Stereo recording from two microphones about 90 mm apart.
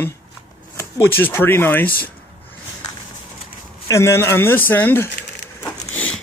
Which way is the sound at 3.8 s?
35° left (ahead or behind).